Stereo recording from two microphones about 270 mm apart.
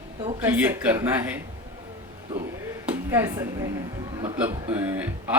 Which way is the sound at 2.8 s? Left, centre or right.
Centre.